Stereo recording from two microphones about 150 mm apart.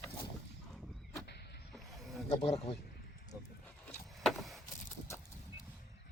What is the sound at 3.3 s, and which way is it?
Wild animals, 15° right (ahead or behind).